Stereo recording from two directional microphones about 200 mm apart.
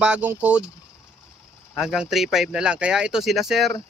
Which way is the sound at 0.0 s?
5° right (ahead or behind).